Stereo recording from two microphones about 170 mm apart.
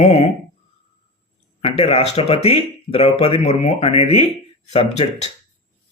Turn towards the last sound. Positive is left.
turn(degrees=40)  # may be behind; listen again after turning